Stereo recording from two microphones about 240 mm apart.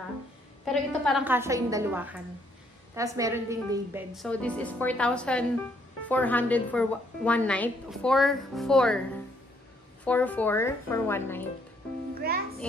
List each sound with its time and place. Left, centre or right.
0.7 s a woman's voice: centre
4.1 s a woman's voice: centre
10.0 s speech: centre
12.2 s music: right